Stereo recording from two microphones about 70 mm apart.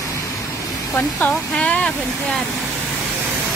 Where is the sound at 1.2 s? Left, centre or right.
Centre.